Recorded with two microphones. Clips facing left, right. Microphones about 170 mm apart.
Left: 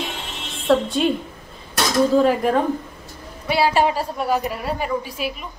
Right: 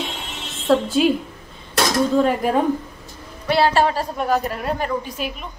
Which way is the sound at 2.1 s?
Centre (ahead or behind).